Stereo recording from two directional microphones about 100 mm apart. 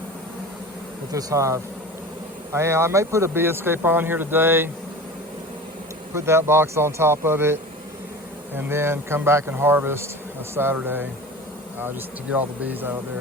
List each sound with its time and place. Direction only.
1.1 s speech: 30° right (ahead or behind)
6.1 s speech: 25° right (ahead or behind)
12.4 s speech: 20° right (ahead or behind)